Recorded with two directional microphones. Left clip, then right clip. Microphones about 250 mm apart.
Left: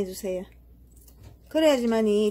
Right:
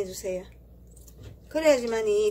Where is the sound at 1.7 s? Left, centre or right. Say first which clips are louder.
Even; left.